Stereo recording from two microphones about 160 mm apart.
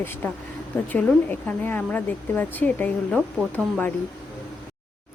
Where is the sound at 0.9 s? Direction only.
10° left (ahead or behind).